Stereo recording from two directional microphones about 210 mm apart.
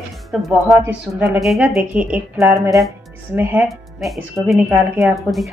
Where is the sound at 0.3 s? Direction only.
Centre (ahead or behind).